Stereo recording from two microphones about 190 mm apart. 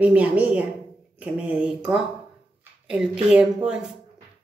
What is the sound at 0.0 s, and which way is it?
A woman's voice, 5° right (ahead or behind).